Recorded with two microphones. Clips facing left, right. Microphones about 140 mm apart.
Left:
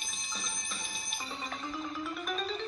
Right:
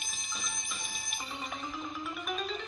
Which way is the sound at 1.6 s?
5° right (ahead or behind).